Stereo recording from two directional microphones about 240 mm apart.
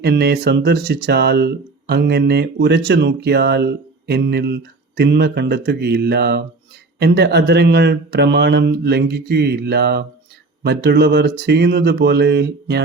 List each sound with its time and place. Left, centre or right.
0.0 s speech: right